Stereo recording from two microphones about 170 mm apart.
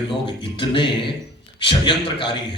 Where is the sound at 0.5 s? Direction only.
30° left (ahead or behind).